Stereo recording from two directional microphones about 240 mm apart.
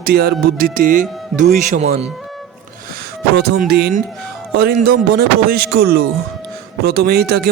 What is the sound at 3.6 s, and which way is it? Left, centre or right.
Speech, right.